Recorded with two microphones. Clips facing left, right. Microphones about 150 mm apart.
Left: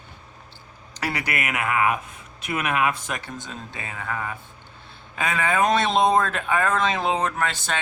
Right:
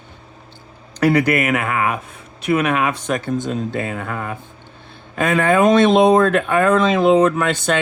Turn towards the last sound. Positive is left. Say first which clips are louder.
# right 9 dB
turn(degrees=-70)  # may be behind; listen again after turning